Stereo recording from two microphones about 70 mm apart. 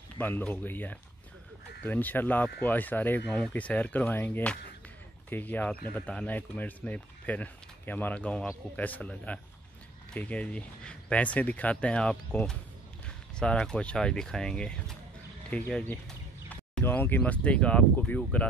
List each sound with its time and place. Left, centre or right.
0.2 s speech: left
16.8 s speech: left
17.2 s speech: centre